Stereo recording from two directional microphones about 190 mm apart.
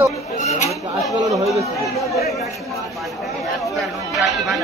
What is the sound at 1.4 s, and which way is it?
Speech, 15° right (ahead or behind).